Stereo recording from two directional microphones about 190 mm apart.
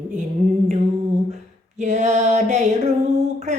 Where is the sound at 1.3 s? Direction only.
35° right (ahead or behind).